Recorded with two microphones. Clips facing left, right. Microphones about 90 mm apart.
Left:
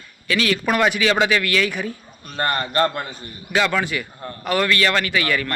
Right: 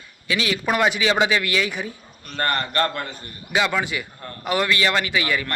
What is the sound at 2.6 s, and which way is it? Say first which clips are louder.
Speech: left 3 dB; 15° left (ahead or behind).